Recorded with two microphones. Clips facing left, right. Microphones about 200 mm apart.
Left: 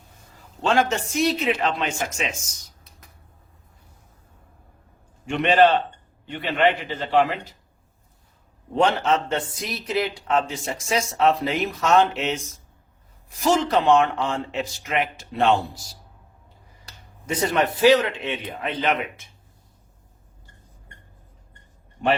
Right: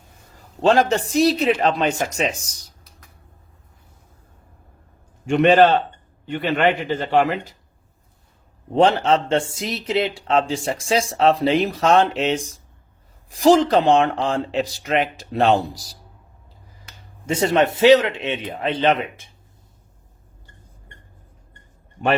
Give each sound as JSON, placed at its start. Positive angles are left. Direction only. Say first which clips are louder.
{"t": 0.3, "sound": "a man's voice", "louder": "right 5 dB", "side_deg": -35}
{"t": 5.2, "sound": "a man's voice", "louder": "right 4 dB", "side_deg": -45}
{"t": 6.9, "sound": "a man's voice", "louder": "right 2 dB", "side_deg": -45}
{"t": 8.7, "sound": "a man's voice", "louder": "right 4 dB", "side_deg": -30}
{"t": 17.2, "sound": "a man's voice", "louder": "right 4 dB", "side_deg": -25}